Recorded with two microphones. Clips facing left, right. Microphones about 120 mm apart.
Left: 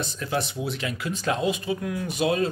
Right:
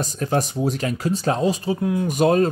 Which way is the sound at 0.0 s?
40° right (ahead or behind).